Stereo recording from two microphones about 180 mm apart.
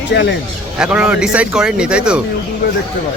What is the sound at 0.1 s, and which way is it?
Speech, 75° left (ahead or behind).